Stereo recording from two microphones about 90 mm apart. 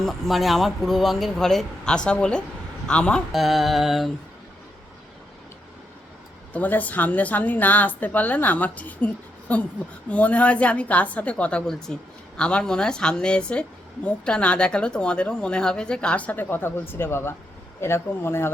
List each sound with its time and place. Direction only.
0.0 s a man's voice: centre (ahead or behind)
3.3 s a man's voice: centre (ahead or behind)
6.5 s a woman's voice: 20° left (ahead or behind)